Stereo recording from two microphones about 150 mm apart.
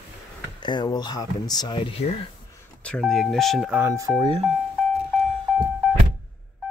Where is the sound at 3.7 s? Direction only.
20° right (ahead or behind).